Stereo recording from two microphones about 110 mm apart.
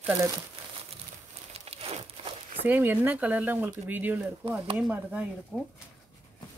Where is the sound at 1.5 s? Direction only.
65° right (ahead or behind).